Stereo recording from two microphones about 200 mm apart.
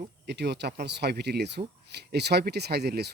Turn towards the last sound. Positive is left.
turn(degrees=-55)  # may be behind; listen again after turning